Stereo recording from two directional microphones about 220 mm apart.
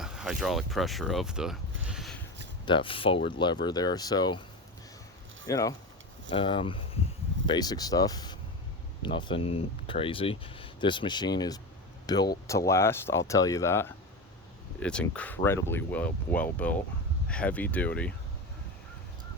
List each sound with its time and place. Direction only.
0.0 s speech: centre (ahead or behind)
2.6 s speech: 25° left (ahead or behind)
5.5 s speech: 15° left (ahead or behind)